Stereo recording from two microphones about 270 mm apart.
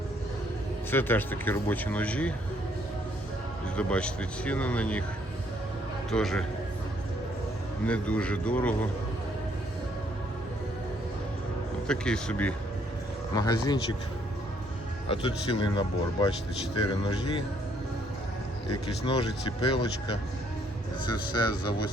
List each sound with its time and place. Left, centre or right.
0.9 s speech: centre
3.8 s speech: centre
6.1 s speech: centre
7.9 s speech: centre
11.9 s speech: centre
15.0 s speech: centre
18.7 s speech: centre
21.0 s speech: centre